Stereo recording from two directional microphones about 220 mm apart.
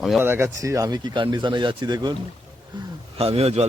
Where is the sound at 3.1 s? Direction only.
25° right (ahead or behind).